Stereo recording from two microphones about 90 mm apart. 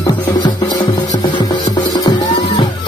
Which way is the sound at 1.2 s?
55° left (ahead or behind).